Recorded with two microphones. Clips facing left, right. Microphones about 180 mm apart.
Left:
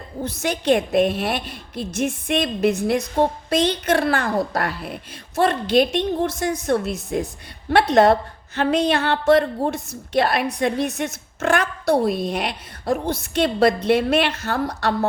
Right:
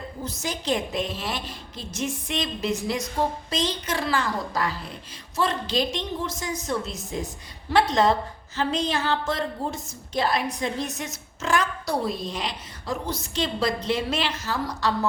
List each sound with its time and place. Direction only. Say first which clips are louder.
0.3 s a woman's voice: left 8 dB; 65° left (ahead or behind)